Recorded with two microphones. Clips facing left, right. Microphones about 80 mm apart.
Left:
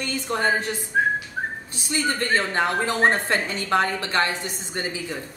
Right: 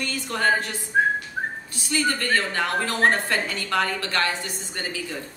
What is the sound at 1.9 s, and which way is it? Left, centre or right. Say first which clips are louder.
A woman's voice: even; left.